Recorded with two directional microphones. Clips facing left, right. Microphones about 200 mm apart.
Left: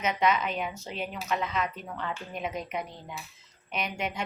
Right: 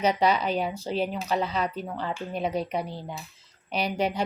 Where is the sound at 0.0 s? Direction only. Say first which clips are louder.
Right 4 dB; 35° right (ahead or behind).